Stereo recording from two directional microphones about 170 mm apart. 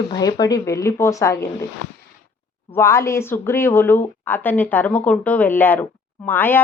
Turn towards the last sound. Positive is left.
turn(degrees=10)  # may be behind; listen again after turning